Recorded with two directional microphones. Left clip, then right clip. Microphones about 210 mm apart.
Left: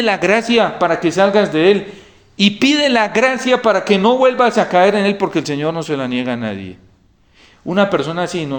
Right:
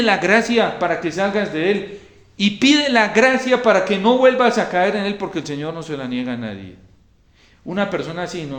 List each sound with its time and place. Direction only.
0.0 s a man's voice: 30° left (ahead or behind)
7.7 s a man's voice: 30° left (ahead or behind)